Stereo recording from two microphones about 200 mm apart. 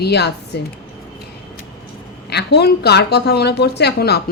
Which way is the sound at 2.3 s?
55° left (ahead or behind).